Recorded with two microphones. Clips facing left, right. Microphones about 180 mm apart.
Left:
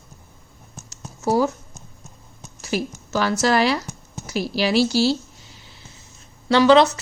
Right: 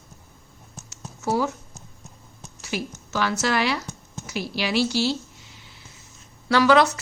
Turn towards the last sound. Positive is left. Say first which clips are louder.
# left 4 dB
turn(degrees=25)  # may be behind; listen again after turning